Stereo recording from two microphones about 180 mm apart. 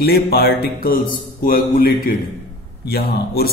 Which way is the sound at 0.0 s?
60° left (ahead or behind).